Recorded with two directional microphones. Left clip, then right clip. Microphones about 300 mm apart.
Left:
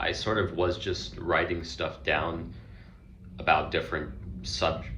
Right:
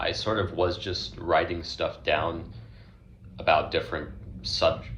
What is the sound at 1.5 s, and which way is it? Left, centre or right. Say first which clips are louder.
Speech: even; centre.